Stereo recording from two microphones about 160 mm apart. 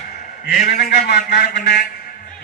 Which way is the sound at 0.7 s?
90° left.